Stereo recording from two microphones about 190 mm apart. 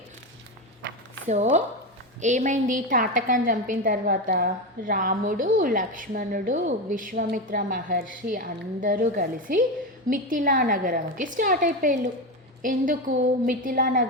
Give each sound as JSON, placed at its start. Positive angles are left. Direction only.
{"t": 1.3, "sound": "a woman's voice", "side_deg": -40}